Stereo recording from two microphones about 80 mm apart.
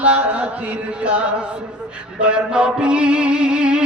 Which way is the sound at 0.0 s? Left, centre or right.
Centre.